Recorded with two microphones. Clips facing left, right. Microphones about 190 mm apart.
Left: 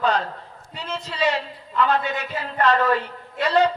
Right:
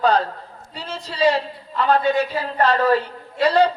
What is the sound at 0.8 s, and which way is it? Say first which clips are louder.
A man's voice: right 3 dB; 35° right (ahead or behind).